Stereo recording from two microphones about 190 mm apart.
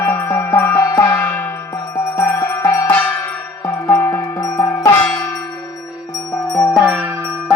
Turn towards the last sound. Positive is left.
turn(degrees=0)  # may be behind; listen again after turning